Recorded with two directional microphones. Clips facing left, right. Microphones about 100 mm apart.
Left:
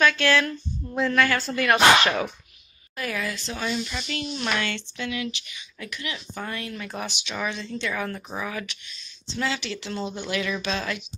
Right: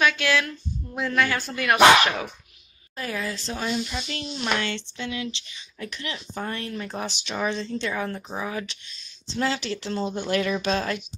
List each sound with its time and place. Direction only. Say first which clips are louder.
0.0 s speech: left 2 dB; 5° right (ahead or behind)
3.0 s speech: even; 30° right (ahead or behind)